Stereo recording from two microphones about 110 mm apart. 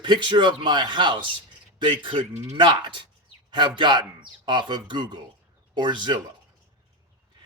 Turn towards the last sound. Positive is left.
turn(degrees=-45)  # may be behind; listen again after turning